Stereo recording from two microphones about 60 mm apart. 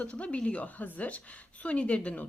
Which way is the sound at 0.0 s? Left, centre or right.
Left.